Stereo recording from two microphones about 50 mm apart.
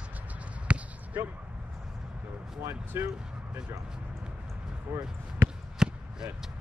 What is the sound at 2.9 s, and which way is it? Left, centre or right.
Speech, right.